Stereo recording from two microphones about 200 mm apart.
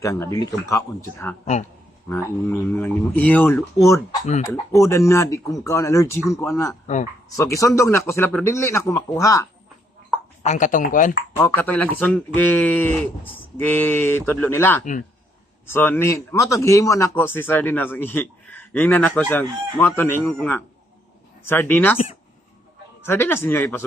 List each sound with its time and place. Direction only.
0.0 s speech: 15° left (ahead or behind)
2.0 s speech: 15° left (ahead or behind)
6.8 s speech: 35° left (ahead or behind)
7.3 s speech: 15° left (ahead or behind)
10.4 s speech: 35° left (ahead or behind)
11.3 s speech: 10° left (ahead or behind)
23.0 s speech: 10° left (ahead or behind)